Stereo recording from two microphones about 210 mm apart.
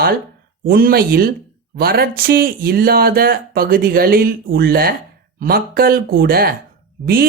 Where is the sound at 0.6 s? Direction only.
45° right (ahead or behind).